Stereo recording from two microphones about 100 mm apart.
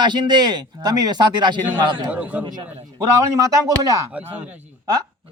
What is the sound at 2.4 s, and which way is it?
Speech, 45° right (ahead or behind).